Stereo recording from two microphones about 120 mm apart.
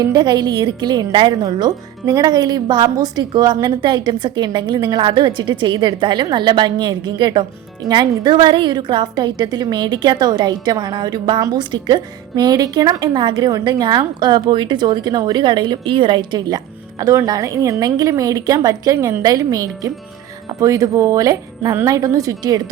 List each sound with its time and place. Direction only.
0.0 s a woman's voice: 35° right (ahead or behind)
17.0 s a woman's voice: 30° right (ahead or behind)